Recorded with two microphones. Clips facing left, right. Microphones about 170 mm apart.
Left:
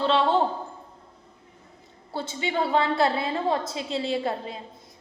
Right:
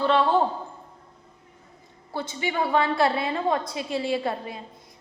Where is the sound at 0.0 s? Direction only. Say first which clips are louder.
Right 1 dB; 25° left (ahead or behind).